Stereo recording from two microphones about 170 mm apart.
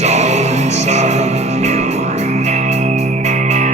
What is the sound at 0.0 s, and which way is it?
Music, 40° right (ahead or behind).